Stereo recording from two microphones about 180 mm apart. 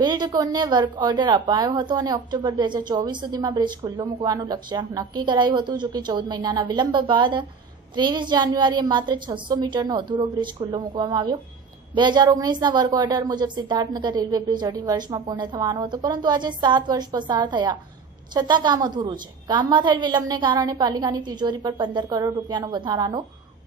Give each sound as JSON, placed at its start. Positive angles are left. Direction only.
{"t": 0.0, "sound": "a woman's voice", "side_deg": -25}